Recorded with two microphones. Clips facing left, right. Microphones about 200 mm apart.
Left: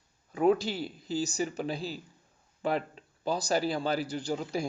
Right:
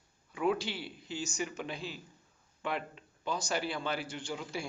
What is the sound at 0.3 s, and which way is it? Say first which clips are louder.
Speech: left 6 dB; 40° left (ahead or behind).